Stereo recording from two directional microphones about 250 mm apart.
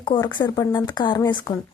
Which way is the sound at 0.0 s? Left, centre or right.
Centre.